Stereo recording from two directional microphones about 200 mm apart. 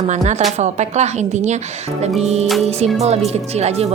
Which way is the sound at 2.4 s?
Centre (ahead or behind).